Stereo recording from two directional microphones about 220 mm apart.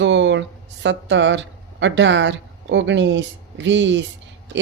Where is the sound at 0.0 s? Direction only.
55° right (ahead or behind).